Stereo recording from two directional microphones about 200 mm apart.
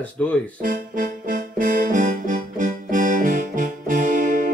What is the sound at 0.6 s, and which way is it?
Music, 40° right (ahead or behind).